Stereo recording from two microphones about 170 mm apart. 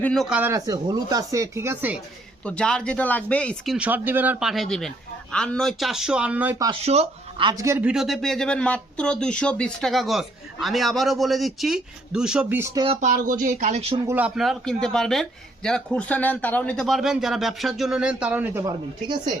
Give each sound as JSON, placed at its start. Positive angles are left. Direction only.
{"t": 0.0, "sound": "speech", "side_deg": 5}
{"t": 0.5, "sound": "speech", "side_deg": -20}
{"t": 2.4, "sound": "speech", "side_deg": 5}
{"t": 3.8, "sound": "speech", "side_deg": -10}
{"t": 6.7, "sound": "speech", "side_deg": -40}
{"t": 7.5, "sound": "speech", "side_deg": -15}
{"t": 13.0, "sound": "speech", "side_deg": -50}
{"t": 14.1, "sound": "speech", "side_deg": -5}